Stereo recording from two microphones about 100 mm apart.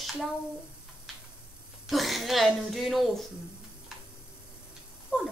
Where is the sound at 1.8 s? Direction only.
Centre (ahead or behind).